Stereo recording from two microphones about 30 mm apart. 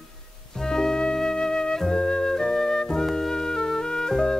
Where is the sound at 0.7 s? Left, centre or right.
Left.